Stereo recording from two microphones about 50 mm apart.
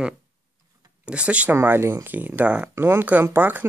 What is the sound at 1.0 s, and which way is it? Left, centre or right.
Speech, right.